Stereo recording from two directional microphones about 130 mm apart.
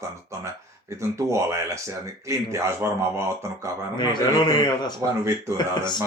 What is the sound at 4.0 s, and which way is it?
Speech, 35° left (ahead or behind).